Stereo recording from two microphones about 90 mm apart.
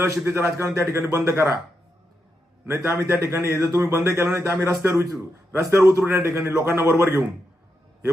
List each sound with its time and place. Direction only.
0.0 s a man's voice: 30° right (ahead or behind)
2.6 s a man's voice: 30° right (ahead or behind)